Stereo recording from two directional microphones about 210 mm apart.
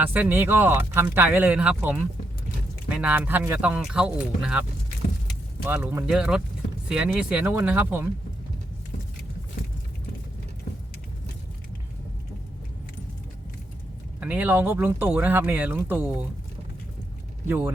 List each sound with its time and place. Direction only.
0.0 s speech: 10° right (ahead or behind)
5.6 s speech: 10° right (ahead or behind)
14.2 s speech: 5° right (ahead or behind)